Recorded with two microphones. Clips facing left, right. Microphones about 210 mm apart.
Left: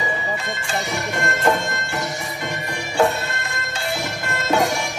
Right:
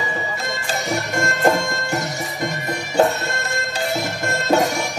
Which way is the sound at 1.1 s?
45° right (ahead or behind).